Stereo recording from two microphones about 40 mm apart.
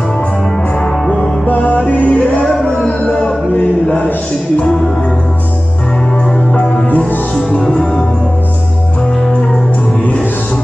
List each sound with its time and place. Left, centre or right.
1.1 s music: left
3.5 s a sound: left
6.6 s music: centre